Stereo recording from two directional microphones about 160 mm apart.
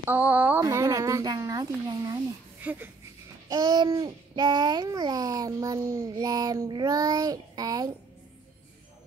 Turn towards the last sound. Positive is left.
turn(degrees=-25)  # may be behind; listen again after turning